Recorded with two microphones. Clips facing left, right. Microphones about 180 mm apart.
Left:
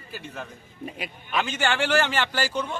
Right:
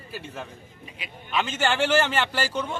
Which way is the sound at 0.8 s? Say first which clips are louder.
Left 9 dB; 50° left (ahead or behind).